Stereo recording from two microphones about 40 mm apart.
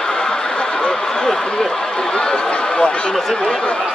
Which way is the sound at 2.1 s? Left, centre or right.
Left.